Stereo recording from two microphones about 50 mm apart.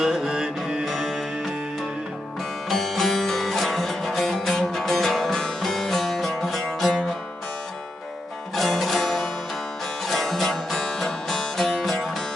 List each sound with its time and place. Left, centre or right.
0.0 s music: centre
0.9 s music: centre
2.6 s music: centre
8.5 s music: centre